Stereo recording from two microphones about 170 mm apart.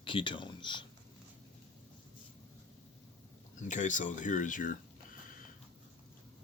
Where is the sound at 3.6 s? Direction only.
50° left (ahead or behind).